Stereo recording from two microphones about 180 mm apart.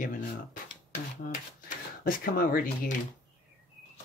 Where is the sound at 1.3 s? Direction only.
50° left (ahead or behind).